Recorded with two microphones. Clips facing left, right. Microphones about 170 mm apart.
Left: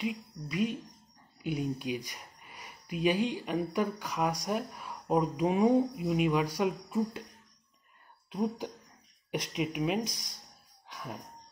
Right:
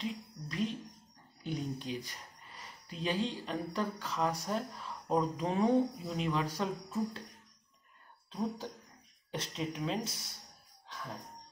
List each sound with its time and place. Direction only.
0.0 s speech: 10° left (ahead or behind)
8.3 s speech: 15° left (ahead or behind)
10.9 s a sound: 15° left (ahead or behind)